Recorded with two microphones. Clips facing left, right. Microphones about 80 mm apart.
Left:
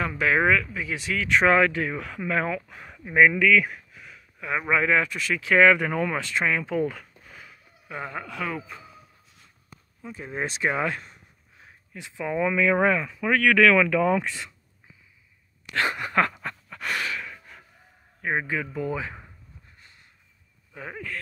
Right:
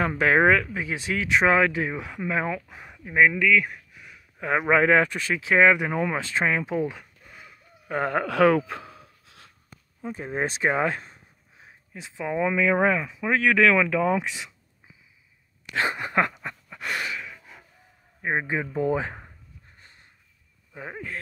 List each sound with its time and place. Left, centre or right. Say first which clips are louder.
0.0 s speech: right 3 dB; right
1.3 s speech: left 1 dB; right; by 3.8 s centre
3.9 s a sound: left 1 dB; centre
4.4 s speech: right 4 dB; right
5.4 s speech: left 1 dB; right
6.8 s a sound: left 1 dB; centre
7.9 s a sound: right 9 dB; right
10.0 s speech: right 3 dB; right; by 14.5 s centre
15.7 s speech: even; right
16.4 s a sound: left 1 dB; centre
18.2 s speech: right 1 dB; right
20.7 s speech: even; centre